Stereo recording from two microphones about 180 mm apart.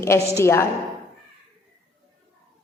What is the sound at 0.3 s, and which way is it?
Speech, 15° left (ahead or behind).